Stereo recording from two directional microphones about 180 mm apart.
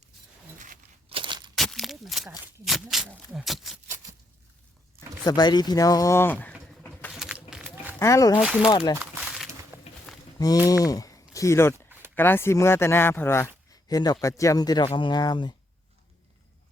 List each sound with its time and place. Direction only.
1.1 s a sound: 25° right (ahead or behind)
1.5 s a sound: centre (ahead or behind)
2.6 s speech: centre (ahead or behind)
5.2 s speech: 25° left (ahead or behind); by 7.1 s 5° left (ahead or behind)
7.2 s duck: 5° right (ahead or behind)
7.9 s speech: 15° left (ahead or behind)
8.4 s speech: 5° right (ahead or behind)
8.7 s speech: 25° left (ahead or behind)
9.7 s walk: 10° right (ahead or behind)
10.3 s speech: 20° left (ahead or behind)